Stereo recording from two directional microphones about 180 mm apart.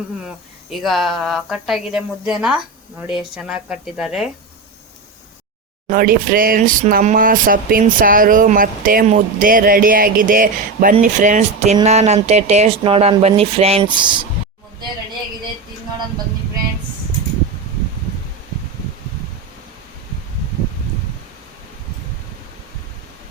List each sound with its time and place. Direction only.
0.7 s speech: centre (ahead or behind)
5.9 s speech: 50° right (ahead or behind); by 14.1 s 25° right (ahead or behind)